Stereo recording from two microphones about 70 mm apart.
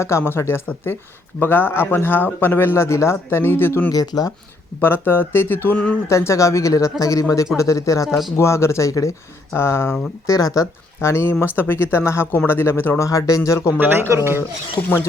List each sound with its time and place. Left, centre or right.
0.3 s speech: left
3.9 s speech: left
4.8 s speech: left
5.7 s speech: centre
6.1 s speech: left
8.0 s speech: centre
8.4 s speech: left
9.6 s speech: left
10.2 s speech: left
13.1 s speech: left
14.1 s speech: right
14.8 s a man's voice: left